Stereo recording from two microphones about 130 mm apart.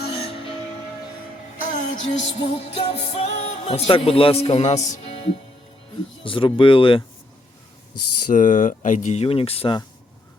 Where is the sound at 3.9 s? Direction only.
45° left (ahead or behind).